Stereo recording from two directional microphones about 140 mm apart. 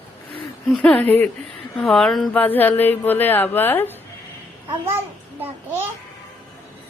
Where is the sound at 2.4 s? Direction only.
15° left (ahead or behind).